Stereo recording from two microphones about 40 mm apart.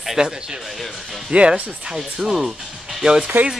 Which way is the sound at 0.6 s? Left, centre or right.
Centre.